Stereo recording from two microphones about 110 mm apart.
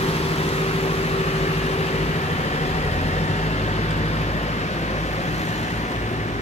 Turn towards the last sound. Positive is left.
turn(degrees=90)